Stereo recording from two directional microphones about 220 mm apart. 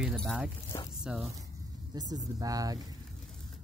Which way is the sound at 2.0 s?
15° right (ahead or behind).